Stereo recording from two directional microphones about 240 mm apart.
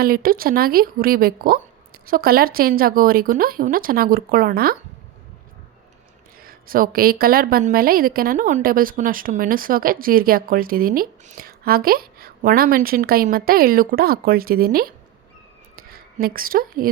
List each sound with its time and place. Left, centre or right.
0.0 s a woman's voice: right
6.4 s a woman's voice: right